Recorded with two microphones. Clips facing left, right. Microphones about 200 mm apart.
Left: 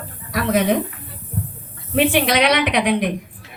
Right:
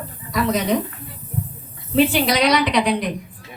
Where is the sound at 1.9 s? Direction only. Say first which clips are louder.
Even; 55° left (ahead or behind).